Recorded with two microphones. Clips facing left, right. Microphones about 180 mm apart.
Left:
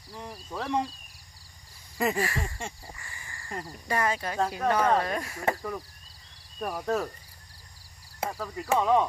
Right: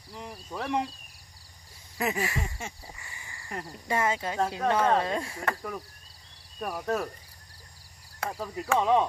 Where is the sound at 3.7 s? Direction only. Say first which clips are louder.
Even; 20° right (ahead or behind).